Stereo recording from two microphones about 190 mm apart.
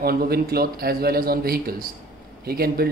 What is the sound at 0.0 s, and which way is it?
A man's voice, 55° right (ahead or behind).